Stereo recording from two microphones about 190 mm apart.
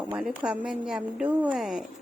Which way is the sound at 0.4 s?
5° right (ahead or behind).